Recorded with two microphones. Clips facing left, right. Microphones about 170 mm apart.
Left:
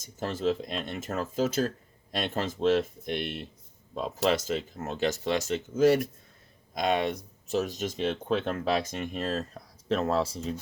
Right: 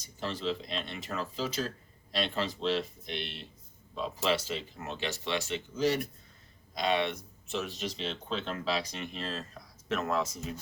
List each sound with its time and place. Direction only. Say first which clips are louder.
0.0 s speech: left 6 dB; 45° left (ahead or behind)
9.9 s speech: left 5 dB; 30° left (ahead or behind)